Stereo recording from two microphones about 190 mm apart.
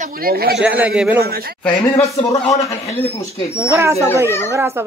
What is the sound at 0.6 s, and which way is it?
Speech, 5° right (ahead or behind).